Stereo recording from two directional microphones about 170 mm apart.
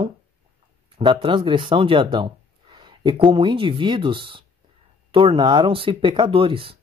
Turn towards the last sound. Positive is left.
turn(degrees=-30)  # may be behind; listen again after turning